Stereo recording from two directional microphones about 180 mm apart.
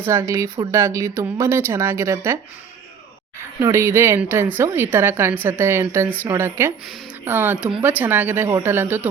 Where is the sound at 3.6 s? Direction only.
15° right (ahead or behind).